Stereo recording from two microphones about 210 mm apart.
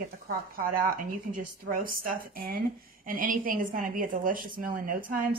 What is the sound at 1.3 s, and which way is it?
A woman's voice, 40° right (ahead or behind).